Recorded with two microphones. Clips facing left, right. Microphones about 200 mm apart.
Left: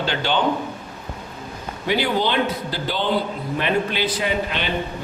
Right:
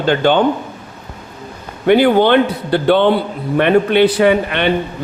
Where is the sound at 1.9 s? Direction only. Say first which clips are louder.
Right 11 dB; 60° right (ahead or behind).